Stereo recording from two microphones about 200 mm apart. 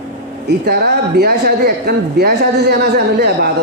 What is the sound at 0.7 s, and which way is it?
A man's voice, 55° right (ahead or behind).